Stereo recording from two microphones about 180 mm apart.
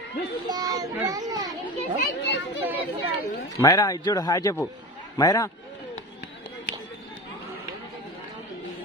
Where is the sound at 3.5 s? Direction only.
20° left (ahead or behind).